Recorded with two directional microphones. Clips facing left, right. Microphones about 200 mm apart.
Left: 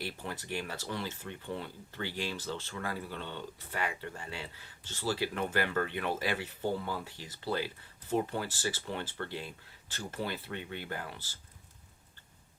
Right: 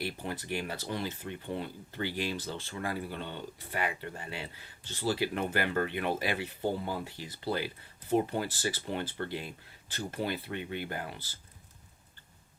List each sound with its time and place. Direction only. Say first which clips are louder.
0.0 s speech: right 3 dB; 15° right (ahead or behind)